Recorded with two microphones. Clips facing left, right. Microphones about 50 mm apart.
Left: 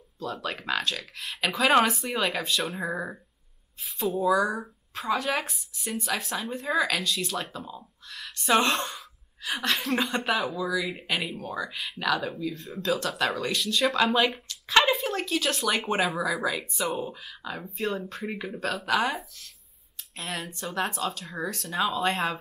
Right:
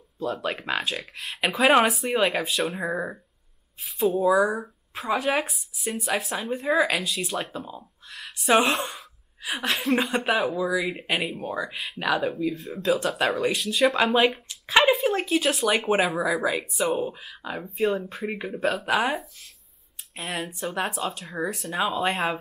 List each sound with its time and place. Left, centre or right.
0.2 s speech: centre
1.1 s speech: centre
2.8 s speech: centre
3.8 s speech: centre
4.2 s speech: centre
7.5 s speech: centre
12.5 s speech: centre
17.6 s speech: centre
20.2 s speech: centre